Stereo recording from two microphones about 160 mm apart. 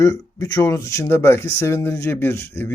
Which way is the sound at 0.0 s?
20° left (ahead or behind).